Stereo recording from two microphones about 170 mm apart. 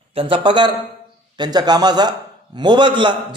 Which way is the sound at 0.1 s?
30° right (ahead or behind).